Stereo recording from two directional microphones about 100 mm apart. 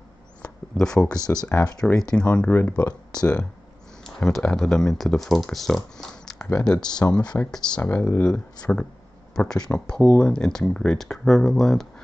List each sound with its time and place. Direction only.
0.7 s speech: 5° left (ahead or behind)
1.1 s speech: 40° left (ahead or behind)
1.5 s speech: 10° left (ahead or behind)
4.0 s a sound: 5° left (ahead or behind)
4.4 s speech: 10° left (ahead or behind)
7.0 s speech: 20° left (ahead or behind); by 11.9 s 5° left (ahead or behind)